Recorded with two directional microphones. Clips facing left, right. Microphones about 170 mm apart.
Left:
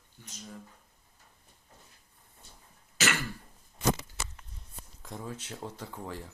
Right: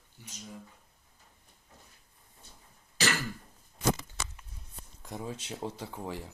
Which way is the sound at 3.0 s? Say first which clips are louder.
Even; 35° right (ahead or behind).